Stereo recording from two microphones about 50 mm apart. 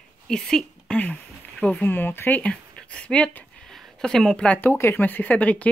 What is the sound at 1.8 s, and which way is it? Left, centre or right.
Speech, left.